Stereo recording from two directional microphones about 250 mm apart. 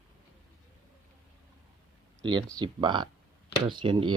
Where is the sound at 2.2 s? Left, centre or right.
Centre.